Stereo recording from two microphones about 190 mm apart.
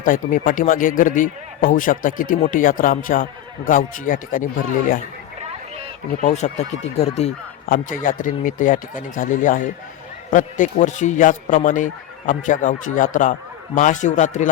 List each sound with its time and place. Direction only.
0.0 s speech: 45° left (ahead or behind)
6.2 s speech: 35° left (ahead or behind)
7.7 s speech: 45° left (ahead or behind)